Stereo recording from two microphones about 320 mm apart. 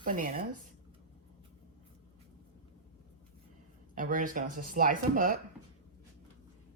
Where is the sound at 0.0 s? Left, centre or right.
Right.